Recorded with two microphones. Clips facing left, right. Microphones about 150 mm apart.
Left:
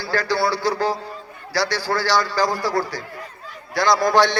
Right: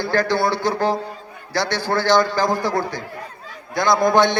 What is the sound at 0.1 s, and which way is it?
Speech, 20° right (ahead or behind).